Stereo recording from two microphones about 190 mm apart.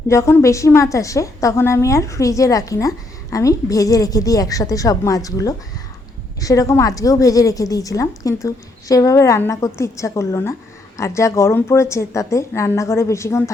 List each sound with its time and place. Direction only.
0.1 s a woman's voice: 15° left (ahead or behind)